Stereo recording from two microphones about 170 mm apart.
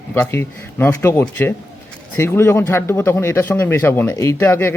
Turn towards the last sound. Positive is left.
turn(degrees=15)  # may be behind; listen again after turning